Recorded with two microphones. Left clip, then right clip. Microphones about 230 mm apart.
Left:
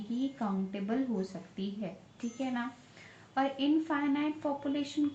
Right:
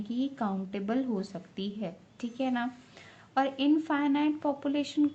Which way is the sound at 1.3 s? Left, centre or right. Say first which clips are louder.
Right 3 dB; right.